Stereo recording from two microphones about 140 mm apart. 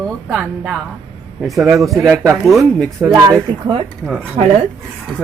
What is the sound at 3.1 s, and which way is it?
Speech, 30° right (ahead or behind).